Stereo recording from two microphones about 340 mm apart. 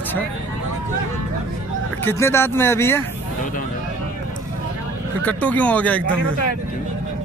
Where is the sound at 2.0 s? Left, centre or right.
Centre.